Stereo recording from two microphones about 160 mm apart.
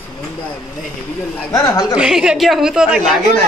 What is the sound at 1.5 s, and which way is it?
Speech, 20° left (ahead or behind).